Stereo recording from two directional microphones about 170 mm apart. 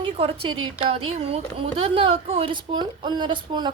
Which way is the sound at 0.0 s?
30° right (ahead or behind).